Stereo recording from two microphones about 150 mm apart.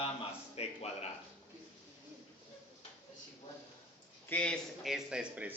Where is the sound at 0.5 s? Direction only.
45° left (ahead or behind).